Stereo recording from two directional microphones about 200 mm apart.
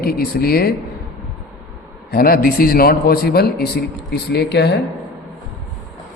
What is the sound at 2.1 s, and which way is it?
A man's voice, 50° left (ahead or behind).